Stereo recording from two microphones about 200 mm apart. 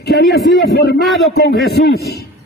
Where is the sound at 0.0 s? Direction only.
55° left (ahead or behind).